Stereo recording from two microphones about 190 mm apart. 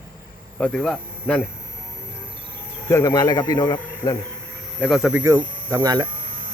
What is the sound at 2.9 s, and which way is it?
Speech, 20° left (ahead or behind).